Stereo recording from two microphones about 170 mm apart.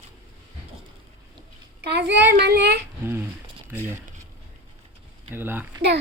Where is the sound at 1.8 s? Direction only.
75° right (ahead or behind).